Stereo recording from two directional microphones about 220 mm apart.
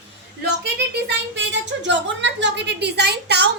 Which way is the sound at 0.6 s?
50° right (ahead or behind).